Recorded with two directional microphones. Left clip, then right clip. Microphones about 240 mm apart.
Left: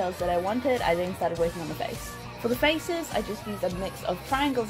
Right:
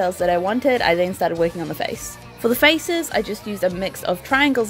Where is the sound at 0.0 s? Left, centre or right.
Right.